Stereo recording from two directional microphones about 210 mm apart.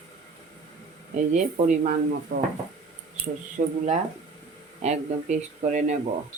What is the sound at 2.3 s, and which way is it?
Speech, 45° right (ahead or behind).